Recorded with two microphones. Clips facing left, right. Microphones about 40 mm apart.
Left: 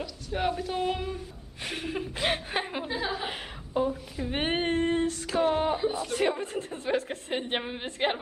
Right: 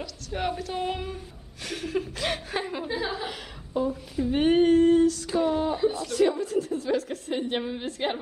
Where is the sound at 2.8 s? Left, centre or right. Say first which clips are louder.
Right 1 dB; centre.